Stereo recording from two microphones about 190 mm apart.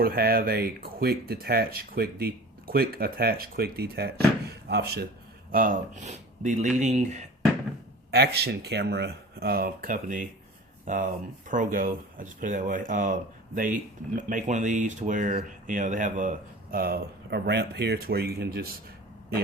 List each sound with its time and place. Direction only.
0.0 s speech: 55° right (ahead or behind)
5.5 s speech: 45° right (ahead or behind)
8.1 s speech: 60° right (ahead or behind); by 16.3 s 40° right (ahead or behind)
16.7 s speech: 50° right (ahead or behind)